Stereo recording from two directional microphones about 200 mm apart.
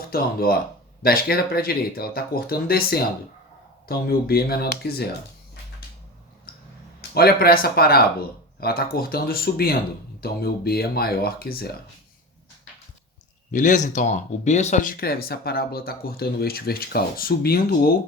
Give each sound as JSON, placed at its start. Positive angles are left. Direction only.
{"t": 0.1, "sound": "speech", "side_deg": 50}
{"t": 7.1, "sound": "speech", "side_deg": 50}
{"t": 13.5, "sound": "speech", "side_deg": 40}